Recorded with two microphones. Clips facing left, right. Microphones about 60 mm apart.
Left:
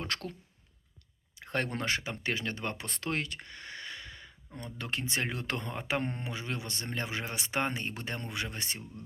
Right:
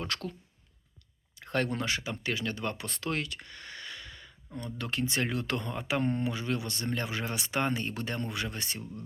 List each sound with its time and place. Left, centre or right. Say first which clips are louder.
0.1 s speech: right 1 dB; left
1.4 s speech: right 3 dB; left